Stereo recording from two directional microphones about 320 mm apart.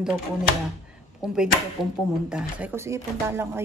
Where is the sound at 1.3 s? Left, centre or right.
Centre.